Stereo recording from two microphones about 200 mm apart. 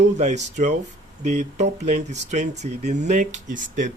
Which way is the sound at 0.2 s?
35° right (ahead or behind).